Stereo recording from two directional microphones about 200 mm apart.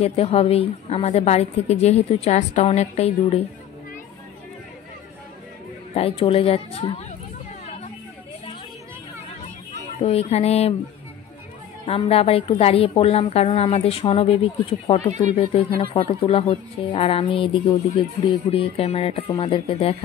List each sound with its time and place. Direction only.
0.0 s a woman's voice: 30° left (ahead or behind)
5.9 s a woman's voice: 30° left (ahead or behind)
7.6 s vehicle: 35° left (ahead or behind)
9.9 s a woman's voice: 30° left (ahead or behind)
11.8 s a woman's voice: 30° left (ahead or behind)